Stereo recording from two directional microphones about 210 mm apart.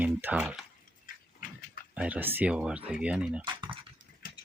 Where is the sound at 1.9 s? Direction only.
5° right (ahead or behind).